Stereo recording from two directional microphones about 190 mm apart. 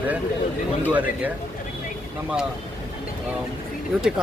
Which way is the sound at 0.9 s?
10° right (ahead or behind).